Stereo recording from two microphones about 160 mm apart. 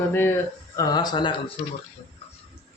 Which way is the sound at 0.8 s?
25° left (ahead or behind).